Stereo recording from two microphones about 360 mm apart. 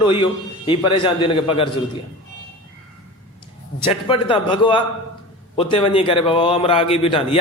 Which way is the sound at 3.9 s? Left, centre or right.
Centre.